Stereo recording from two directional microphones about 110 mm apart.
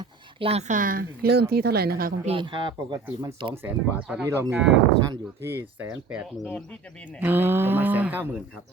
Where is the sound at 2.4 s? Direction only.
45° right (ahead or behind).